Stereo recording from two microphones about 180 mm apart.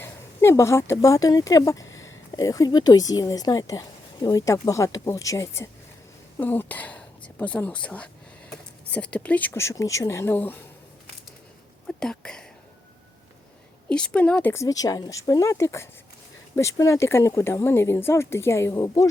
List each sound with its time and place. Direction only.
0.0 s a woman's voice: 15° left (ahead or behind)
11.9 s speech: 5° left (ahead or behind)
13.9 s speech: 5° left (ahead or behind)